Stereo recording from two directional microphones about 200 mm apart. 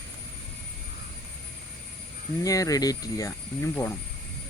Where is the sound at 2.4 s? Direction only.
15° left (ahead or behind).